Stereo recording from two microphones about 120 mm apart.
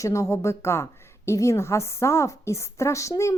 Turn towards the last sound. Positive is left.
turn(degrees=25)  # may be behind; listen again after turning